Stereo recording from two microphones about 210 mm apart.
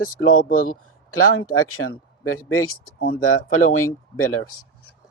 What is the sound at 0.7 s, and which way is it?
Speech, 90° left.